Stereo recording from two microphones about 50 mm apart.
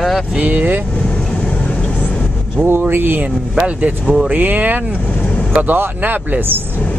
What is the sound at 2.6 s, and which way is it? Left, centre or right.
Speech, right.